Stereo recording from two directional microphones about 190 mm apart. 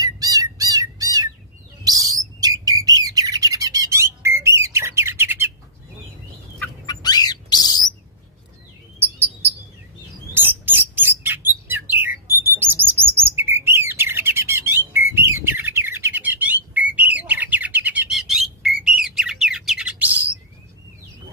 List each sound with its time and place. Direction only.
0.0 s bird: 20° right (ahead or behind)
6.6 s turkey: 20° left (ahead or behind)
10.3 s bird: 10° right (ahead or behind)